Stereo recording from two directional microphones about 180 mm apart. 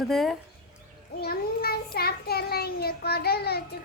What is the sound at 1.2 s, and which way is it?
Child singing, 60° left (ahead or behind).